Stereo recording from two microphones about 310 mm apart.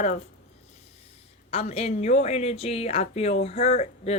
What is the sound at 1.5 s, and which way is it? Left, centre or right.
Speech, centre.